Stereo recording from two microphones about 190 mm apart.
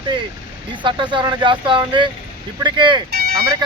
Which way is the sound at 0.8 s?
25° right (ahead or behind).